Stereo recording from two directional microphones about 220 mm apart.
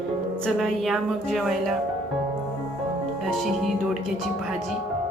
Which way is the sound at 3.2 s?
Centre (ahead or behind).